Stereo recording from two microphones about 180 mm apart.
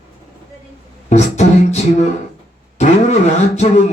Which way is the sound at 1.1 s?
40° left (ahead or behind).